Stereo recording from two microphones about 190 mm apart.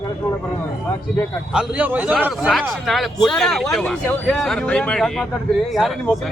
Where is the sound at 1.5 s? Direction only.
10° right (ahead or behind).